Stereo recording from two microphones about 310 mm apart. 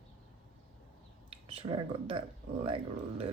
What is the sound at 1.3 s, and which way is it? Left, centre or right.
Speech, centre.